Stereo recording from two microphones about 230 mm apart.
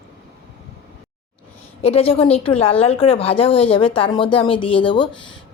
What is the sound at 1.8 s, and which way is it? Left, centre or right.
A woman's voice, left.